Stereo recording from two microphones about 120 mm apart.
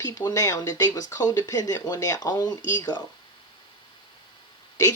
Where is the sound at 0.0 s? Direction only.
30° left (ahead or behind).